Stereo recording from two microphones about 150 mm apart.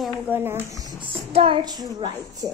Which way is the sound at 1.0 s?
40° right (ahead or behind).